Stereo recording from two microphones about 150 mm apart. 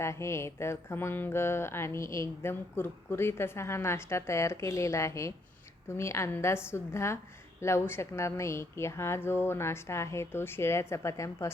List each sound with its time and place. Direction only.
0.0 s mantra: 20° left (ahead or behind)